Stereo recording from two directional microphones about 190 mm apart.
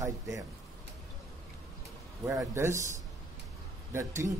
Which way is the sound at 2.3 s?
15° right (ahead or behind).